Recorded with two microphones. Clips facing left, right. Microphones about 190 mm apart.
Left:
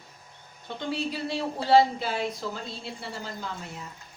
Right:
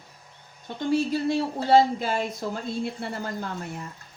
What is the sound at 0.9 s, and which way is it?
Speech, 45° right (ahead or behind).